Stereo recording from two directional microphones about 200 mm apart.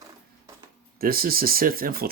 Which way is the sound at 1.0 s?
50° right (ahead or behind).